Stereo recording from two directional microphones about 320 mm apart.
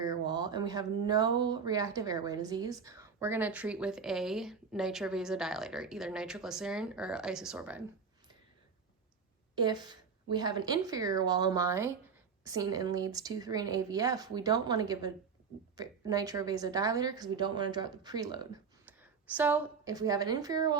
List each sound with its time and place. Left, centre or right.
0.0 s speech: centre
9.6 s a woman's voice: centre